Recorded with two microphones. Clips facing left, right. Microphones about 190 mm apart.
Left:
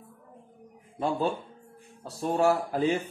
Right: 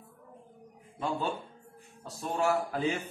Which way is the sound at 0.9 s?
35° left (ahead or behind).